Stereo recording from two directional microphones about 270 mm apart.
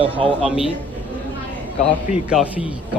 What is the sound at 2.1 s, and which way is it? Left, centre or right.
Speech, centre.